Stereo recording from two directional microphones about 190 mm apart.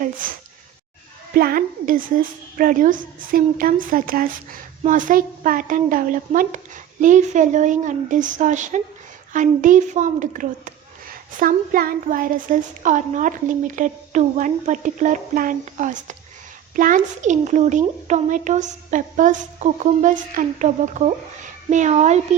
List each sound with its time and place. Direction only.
1.4 s a woman's voice: 50° right (ahead or behind)